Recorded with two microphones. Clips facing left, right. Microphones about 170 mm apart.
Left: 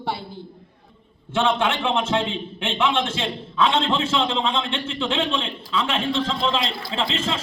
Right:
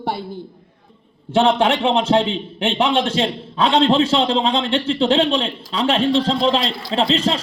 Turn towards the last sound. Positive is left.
turn(degrees=-35)  # may be behind; listen again after turning